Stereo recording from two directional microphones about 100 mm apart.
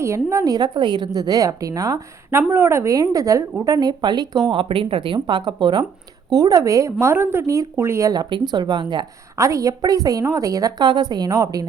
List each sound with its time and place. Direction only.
0.0 s a woman's voice: 30° right (ahead or behind)
2.5 s a woman's voice: 25° right (ahead or behind); by 4.5 s 45° right (ahead or behind)
4.5 s speech: 60° right (ahead or behind)
6.3 s a woman's voice: 35° right (ahead or behind)
8.1 s speech: 45° right (ahead or behind)
9.3 s a woman's voice: 30° right (ahead or behind)